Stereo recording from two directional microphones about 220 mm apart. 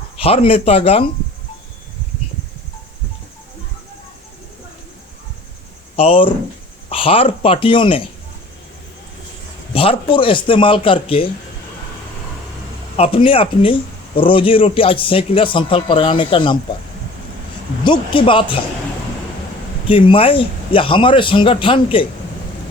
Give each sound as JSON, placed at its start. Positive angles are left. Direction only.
{"t": 0.2, "sound": "a man's voice", "side_deg": 25}
{"t": 6.0, "sound": "a man's voice", "side_deg": 25}
{"t": 9.7, "sound": "a man's voice", "side_deg": 25}
{"t": 13.0, "sound": "a man's voice", "side_deg": 25}
{"t": 17.8, "sound": "a man's voice", "side_deg": 20}
{"t": 19.9, "sound": "a man's voice", "side_deg": 25}